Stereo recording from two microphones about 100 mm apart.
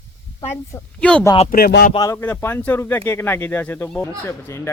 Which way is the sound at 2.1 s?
20° left (ahead or behind).